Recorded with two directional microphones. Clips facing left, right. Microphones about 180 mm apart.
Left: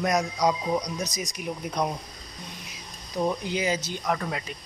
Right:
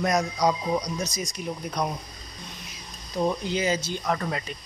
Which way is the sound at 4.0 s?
5° left (ahead or behind).